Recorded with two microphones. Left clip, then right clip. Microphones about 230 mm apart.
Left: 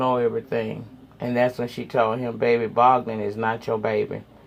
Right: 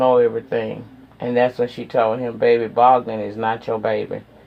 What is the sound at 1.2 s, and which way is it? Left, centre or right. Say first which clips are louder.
Speech: right 5 dB; left.